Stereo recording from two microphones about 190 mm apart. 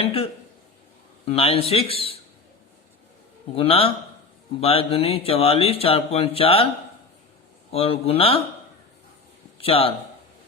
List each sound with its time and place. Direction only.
0.0 s a sound: 30° left (ahead or behind)
1.2 s speech: 30° left (ahead or behind)
3.5 s a man's voice: 30° left (ahead or behind)
7.7 s speech: 30° left (ahead or behind)
9.6 s a man's voice: 30° left (ahead or behind)